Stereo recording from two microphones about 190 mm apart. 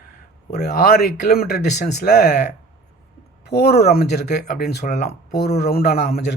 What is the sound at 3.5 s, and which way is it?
Speech, 60° left (ahead or behind).